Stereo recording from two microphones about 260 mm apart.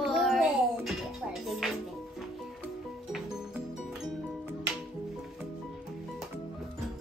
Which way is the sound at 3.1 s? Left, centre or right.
Centre.